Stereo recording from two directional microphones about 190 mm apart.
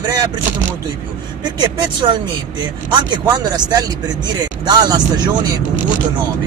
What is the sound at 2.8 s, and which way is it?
Speech, 20° right (ahead or behind).